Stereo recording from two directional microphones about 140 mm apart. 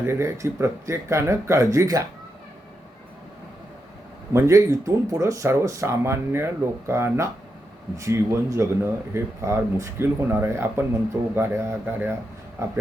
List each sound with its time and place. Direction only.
0.0 s speech: 20° right (ahead or behind)
4.3 s speech: 20° right (ahead or behind)